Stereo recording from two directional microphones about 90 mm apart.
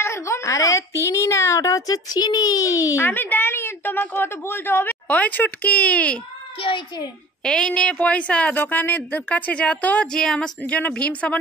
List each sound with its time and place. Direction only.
0.0 s a woman's voice: 30° left (ahead or behind)
3.0 s a woman's voice: 20° left (ahead or behind)
5.0 s a woman's voice: 15° left (ahead or behind)
7.4 s a woman's voice: 10° left (ahead or behind)